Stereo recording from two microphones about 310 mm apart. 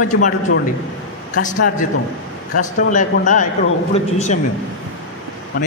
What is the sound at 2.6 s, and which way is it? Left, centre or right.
A man's voice, left.